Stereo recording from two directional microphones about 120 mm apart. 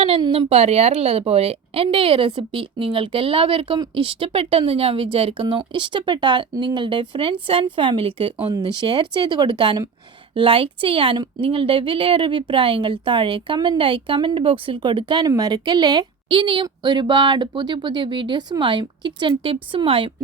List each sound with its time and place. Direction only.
0.2 s speech: 50° right (ahead or behind)
8.4 s speech: 35° right (ahead or behind)